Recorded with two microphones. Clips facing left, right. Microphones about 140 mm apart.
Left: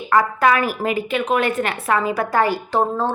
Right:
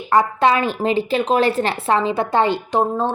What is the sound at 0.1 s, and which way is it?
A woman's voice, 25° right (ahead or behind).